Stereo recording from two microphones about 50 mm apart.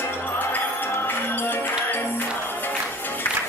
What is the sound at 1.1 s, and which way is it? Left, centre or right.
Music, left.